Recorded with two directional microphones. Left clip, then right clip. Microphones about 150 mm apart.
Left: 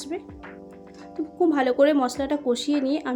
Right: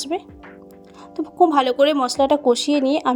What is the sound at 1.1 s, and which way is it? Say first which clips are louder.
A woman's voice: right 7 dB; 45° right (ahead or behind).